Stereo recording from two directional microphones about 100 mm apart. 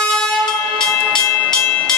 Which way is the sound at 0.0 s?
10° left (ahead or behind).